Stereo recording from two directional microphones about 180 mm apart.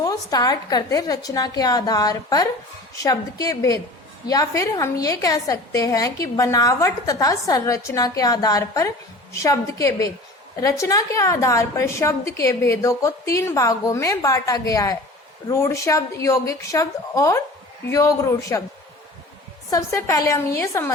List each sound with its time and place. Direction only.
0.0 s a woman's voice: 20° left (ahead or behind)
19.7 s a woman's voice: 15° left (ahead or behind)